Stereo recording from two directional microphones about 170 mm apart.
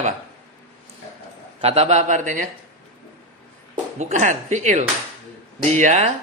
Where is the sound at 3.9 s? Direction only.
45° right (ahead or behind).